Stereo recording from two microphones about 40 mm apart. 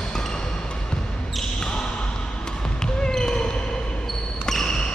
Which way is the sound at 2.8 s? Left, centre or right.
Centre.